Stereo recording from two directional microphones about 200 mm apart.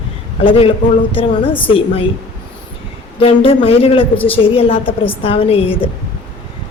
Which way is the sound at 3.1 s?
30° left (ahead or behind).